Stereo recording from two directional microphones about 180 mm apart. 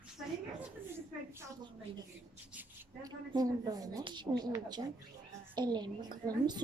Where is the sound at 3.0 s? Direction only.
20° right (ahead or behind).